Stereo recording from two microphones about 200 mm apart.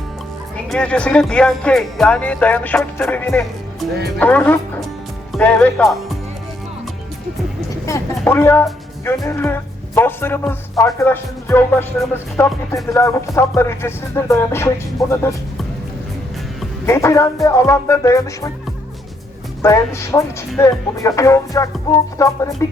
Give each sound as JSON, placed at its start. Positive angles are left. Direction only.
{"t": 0.5, "sound": "speech", "side_deg": 5}
{"t": 7.9, "sound": "a woman's voice", "side_deg": 15}
{"t": 16.8, "sound": "speech", "side_deg": 15}
{"t": 19.6, "sound": "speech", "side_deg": 15}